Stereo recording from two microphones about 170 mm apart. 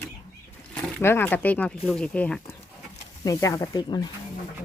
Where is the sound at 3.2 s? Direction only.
20° left (ahead or behind).